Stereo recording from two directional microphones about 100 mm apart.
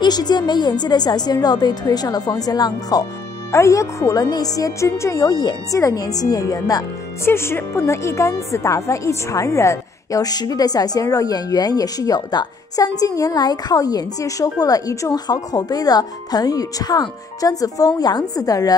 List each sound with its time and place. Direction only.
0.0 s a woman's voice: 45° left (ahead or behind)
3.5 s a woman's voice: 30° left (ahead or behind)
7.2 s a woman's voice: 25° left (ahead or behind)